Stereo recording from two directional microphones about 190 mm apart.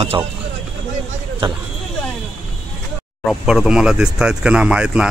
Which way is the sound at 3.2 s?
Centre (ahead or behind).